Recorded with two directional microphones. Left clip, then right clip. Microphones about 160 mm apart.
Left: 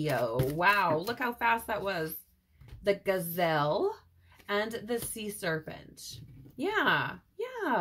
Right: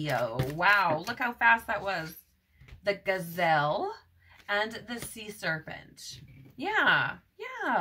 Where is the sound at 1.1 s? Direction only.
40° right (ahead or behind).